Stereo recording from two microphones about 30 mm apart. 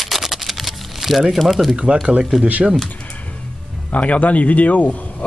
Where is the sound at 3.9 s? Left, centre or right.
Left.